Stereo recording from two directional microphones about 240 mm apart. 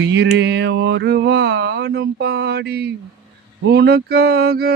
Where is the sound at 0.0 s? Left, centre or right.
Right.